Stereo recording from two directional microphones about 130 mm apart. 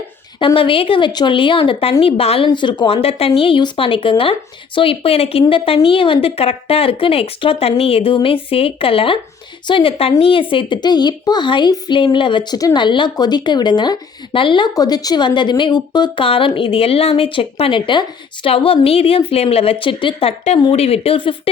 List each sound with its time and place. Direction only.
0.3 s a woman's voice: 40° left (ahead or behind)
2.5 s a woman's voice: 35° left (ahead or behind)